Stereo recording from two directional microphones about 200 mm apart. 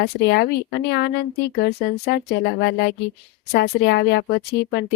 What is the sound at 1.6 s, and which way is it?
A woman's voice, 55° left (ahead or behind).